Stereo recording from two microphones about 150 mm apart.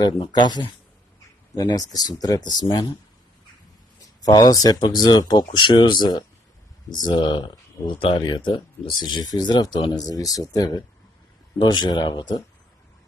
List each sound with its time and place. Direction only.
0.0 s speech: 30° left (ahead or behind)
4.2 s speech: 25° left (ahead or behind)